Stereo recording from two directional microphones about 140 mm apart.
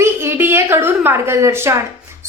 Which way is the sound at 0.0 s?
15° right (ahead or behind).